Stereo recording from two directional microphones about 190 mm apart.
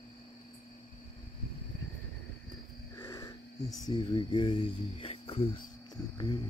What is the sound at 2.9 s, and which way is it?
Speech, 15° left (ahead or behind).